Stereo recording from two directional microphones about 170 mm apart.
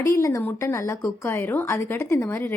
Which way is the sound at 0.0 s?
20° left (ahead or behind).